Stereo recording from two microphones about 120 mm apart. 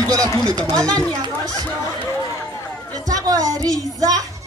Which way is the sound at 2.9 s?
30° right (ahead or behind).